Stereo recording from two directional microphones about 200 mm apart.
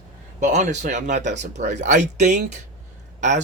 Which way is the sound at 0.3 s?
35° right (ahead or behind).